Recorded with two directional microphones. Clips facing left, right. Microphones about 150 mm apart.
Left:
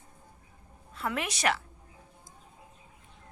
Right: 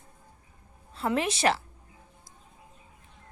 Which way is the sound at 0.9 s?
30° right (ahead or behind).